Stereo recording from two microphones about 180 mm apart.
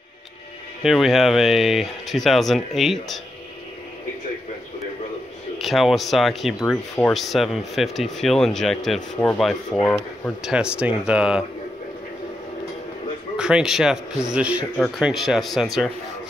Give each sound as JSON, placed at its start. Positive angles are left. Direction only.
{"t": 0.8, "sound": "speech", "side_deg": 0}
{"t": 5.6, "sound": "speech", "side_deg": 0}
{"t": 13.4, "sound": "speech", "side_deg": -5}